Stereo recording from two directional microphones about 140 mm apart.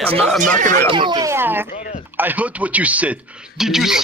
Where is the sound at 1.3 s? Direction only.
15° right (ahead or behind).